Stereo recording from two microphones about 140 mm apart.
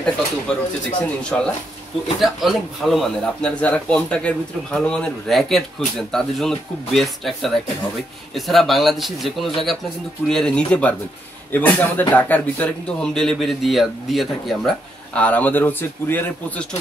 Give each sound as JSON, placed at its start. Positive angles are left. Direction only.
{"t": 0.5, "sound": "a man's voice", "side_deg": 5}